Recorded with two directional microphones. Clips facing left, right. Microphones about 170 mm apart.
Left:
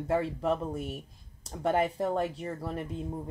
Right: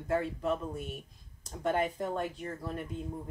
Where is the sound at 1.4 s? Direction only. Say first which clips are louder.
Left 3 dB; 30° left (ahead or behind).